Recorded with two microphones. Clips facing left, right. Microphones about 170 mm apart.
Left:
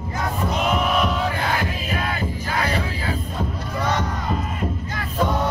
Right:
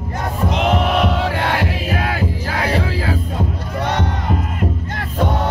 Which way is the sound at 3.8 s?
65° right (ahead or behind).